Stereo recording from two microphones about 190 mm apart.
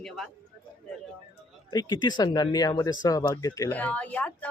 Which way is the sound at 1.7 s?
20° left (ahead or behind).